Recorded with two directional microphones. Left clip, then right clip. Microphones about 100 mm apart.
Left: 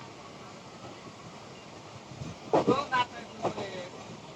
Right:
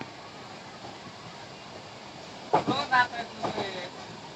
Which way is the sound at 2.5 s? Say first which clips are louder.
Right 2 dB; 25° left (ahead or behind).